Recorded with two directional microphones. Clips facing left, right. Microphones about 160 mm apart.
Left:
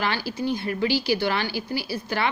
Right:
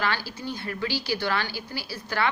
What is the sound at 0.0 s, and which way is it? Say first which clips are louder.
A woman's voice: left 3 dB; 15° left (ahead or behind).